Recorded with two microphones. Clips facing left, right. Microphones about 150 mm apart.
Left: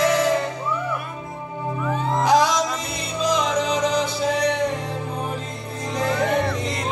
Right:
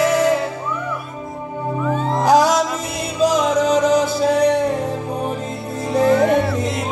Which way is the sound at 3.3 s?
45° right (ahead or behind).